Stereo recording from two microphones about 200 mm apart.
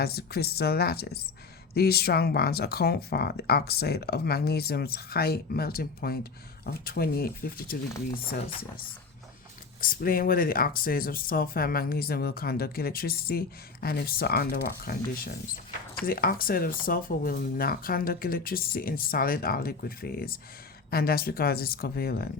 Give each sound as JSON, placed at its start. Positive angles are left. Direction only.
{"t": 0.0, "sound": "speech", "side_deg": 50}
{"t": 9.8, "sound": "speech", "side_deg": 45}
{"t": 16.0, "sound": "speech", "side_deg": 45}